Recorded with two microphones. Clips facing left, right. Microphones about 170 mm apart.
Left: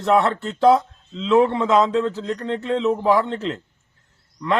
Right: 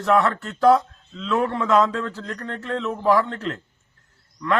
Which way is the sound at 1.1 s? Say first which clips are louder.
Left 6 dB; 25° left (ahead or behind).